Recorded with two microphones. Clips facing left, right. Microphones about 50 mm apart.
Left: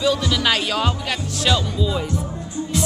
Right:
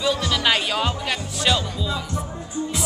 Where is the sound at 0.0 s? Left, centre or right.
Centre.